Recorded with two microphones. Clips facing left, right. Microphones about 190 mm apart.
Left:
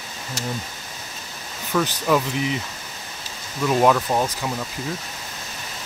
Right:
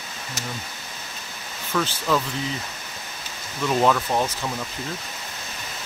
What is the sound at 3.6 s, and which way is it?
Speech, 5° left (ahead or behind).